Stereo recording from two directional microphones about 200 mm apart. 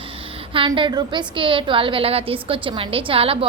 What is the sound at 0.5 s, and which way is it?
A woman's voice, 25° right (ahead or behind).